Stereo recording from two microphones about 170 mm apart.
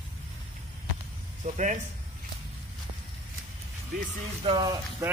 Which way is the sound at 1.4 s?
45° right (ahead or behind).